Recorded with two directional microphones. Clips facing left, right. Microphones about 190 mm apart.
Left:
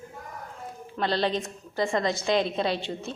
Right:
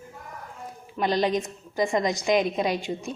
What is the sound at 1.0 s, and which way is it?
A woman's voice, 15° right (ahead or behind).